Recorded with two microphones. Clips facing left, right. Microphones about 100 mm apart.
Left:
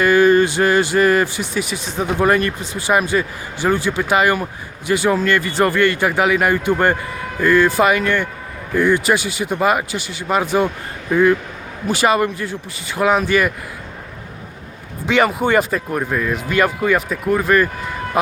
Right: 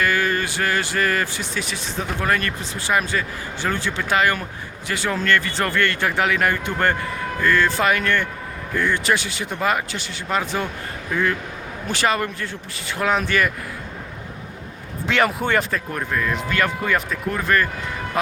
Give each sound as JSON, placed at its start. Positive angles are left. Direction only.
{"t": 0.0, "sound": "speech", "side_deg": 20}
{"t": 15.0, "sound": "speech", "side_deg": 0}